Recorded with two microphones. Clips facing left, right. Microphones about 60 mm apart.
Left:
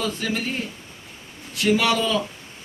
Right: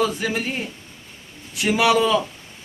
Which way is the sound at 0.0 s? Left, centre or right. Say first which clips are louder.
Right 4 dB; centre.